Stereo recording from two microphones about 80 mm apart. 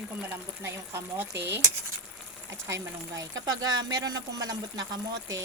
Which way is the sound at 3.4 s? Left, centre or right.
Right.